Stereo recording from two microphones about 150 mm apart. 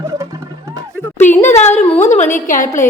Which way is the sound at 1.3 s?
50° left (ahead or behind).